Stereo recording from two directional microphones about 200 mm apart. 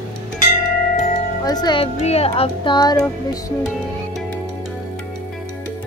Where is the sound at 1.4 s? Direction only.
20° left (ahead or behind).